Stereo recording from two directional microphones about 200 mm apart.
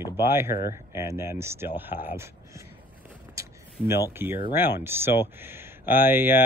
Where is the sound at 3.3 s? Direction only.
15° right (ahead or behind).